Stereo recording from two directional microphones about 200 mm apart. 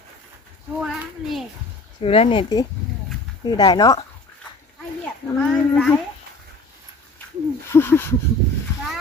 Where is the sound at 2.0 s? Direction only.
30° left (ahead or behind).